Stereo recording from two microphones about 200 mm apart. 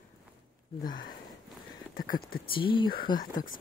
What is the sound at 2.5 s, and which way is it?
Speech, 25° left (ahead or behind).